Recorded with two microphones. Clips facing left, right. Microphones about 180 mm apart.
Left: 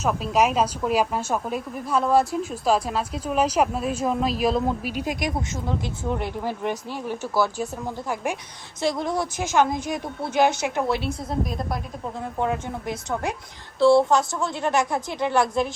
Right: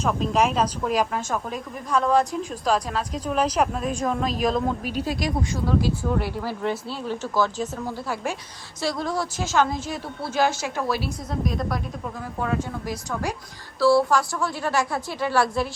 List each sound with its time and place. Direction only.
0.0 s a woman's voice: 5° left (ahead or behind)
5.0 s a woman's voice: 20° left (ahead or behind)
12.4 s a woman's voice: 20° left (ahead or behind)